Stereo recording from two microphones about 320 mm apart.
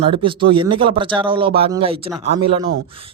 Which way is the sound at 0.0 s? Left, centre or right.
Centre.